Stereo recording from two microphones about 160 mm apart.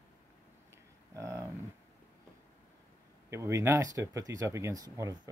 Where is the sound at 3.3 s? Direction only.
15° right (ahead or behind).